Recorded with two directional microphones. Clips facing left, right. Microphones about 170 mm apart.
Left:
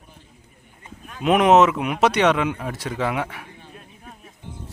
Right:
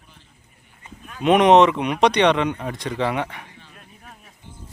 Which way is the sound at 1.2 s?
Centre (ahead or behind).